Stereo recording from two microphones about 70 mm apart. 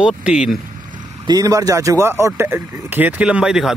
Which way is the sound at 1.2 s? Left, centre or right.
Right.